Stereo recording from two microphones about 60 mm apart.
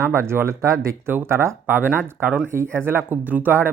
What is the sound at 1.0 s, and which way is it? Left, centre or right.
Speech, right.